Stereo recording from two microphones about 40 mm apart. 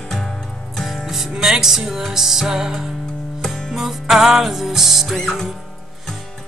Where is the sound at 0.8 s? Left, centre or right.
Centre.